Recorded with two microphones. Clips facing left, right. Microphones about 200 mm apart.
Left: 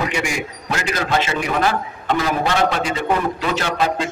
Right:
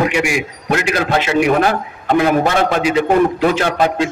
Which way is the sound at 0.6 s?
60° right (ahead or behind).